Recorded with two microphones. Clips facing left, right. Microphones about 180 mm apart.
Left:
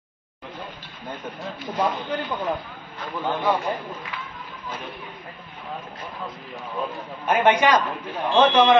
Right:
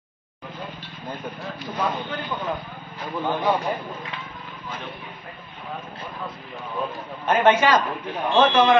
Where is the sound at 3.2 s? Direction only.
10° right (ahead or behind).